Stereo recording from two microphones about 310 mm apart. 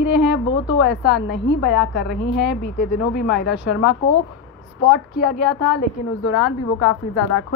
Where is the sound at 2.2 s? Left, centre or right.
Left.